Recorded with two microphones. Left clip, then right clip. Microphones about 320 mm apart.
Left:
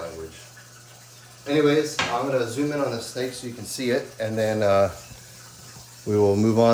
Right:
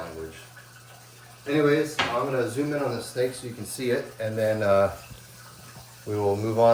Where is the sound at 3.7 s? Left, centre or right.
Left.